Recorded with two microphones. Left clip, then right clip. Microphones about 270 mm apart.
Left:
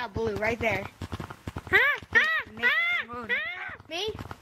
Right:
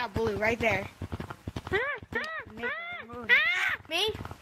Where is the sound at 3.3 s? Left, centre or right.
Right.